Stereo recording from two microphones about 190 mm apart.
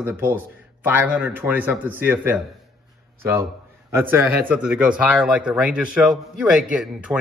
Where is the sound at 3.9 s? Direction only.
10° right (ahead or behind).